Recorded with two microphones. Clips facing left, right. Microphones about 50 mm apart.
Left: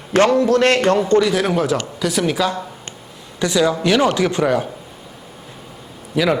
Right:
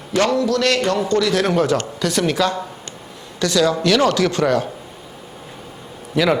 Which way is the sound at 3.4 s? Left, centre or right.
Centre.